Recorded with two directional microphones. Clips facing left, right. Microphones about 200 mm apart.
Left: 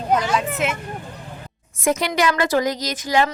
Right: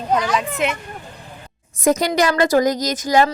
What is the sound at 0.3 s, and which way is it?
Speech, centre (ahead or behind).